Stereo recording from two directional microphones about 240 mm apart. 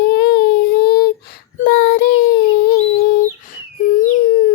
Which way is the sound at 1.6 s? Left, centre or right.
Left.